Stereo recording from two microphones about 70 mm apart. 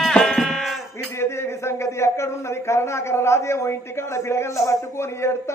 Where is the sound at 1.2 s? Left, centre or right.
Left.